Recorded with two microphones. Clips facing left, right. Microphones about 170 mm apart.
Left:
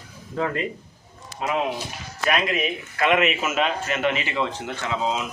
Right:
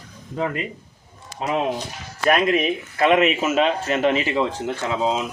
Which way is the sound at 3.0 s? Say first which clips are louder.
Right 3 dB; 35° right (ahead or behind).